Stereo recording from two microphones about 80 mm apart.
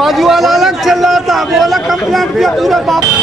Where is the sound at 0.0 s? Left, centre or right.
Centre.